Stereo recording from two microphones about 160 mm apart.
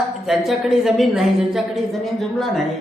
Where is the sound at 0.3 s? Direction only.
Centre (ahead or behind).